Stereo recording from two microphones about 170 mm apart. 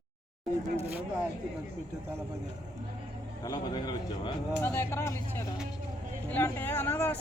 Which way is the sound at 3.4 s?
25° left (ahead or behind).